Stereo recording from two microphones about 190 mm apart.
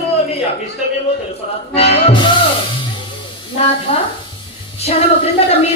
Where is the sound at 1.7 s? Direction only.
30° left (ahead or behind).